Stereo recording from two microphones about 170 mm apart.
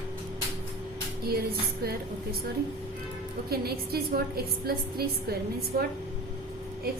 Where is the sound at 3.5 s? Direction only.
65° right (ahead or behind).